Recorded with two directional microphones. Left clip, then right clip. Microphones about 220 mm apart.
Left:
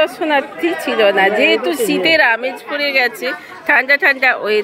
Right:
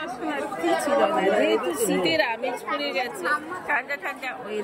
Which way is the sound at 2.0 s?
5° right (ahead or behind).